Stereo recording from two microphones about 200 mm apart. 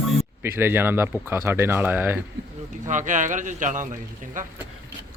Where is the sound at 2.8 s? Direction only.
40° right (ahead or behind).